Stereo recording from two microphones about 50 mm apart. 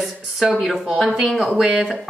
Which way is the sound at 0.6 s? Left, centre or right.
Centre.